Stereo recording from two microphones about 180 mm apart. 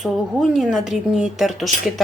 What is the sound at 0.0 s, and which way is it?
Speech, centre (ahead or behind).